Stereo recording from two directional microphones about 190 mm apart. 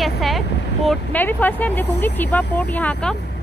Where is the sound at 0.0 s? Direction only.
Centre (ahead or behind).